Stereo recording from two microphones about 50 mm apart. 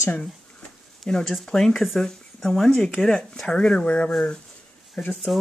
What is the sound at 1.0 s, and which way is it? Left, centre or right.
Speech, centre.